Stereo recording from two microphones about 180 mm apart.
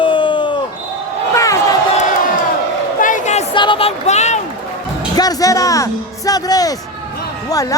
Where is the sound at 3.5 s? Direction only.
30° left (ahead or behind).